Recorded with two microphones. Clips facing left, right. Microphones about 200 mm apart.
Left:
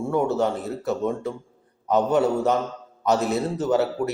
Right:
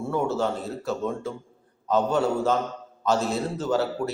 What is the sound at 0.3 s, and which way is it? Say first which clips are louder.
A man's voice: left 3 dB; 20° left (ahead or behind).